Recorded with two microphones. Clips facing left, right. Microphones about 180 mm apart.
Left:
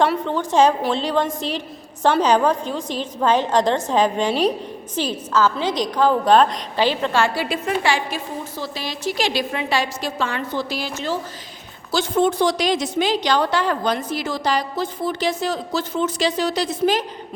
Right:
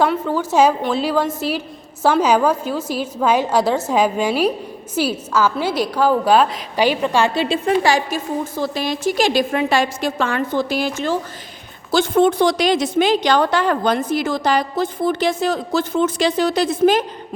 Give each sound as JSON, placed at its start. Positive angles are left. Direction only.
{"t": 0.0, "sound": "a woman's voice", "side_deg": -5}
{"t": 7.9, "sound": "a woman's voice", "side_deg": -45}